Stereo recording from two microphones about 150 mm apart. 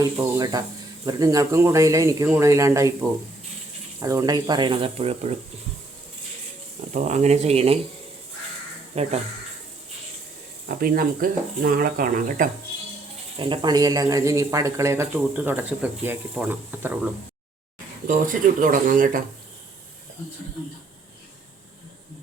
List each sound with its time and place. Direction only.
0.0 s speech: 25° right (ahead or behind); by 5.3 s 40° right (ahead or behind)
6.9 s speech: 55° right (ahead or behind)
8.9 s speech: 40° right (ahead or behind)
10.7 s speech: 80° right
13.4 s speech: 30° right (ahead or behind); by 17.1 s 10° right (ahead or behind)
18.1 s speech: 65° right (ahead or behind)